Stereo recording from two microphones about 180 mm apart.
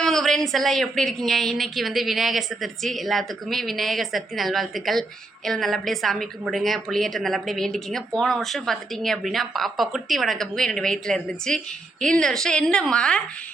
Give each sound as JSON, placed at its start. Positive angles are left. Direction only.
{"t": 0.0, "sound": "a woman's voice", "side_deg": 0}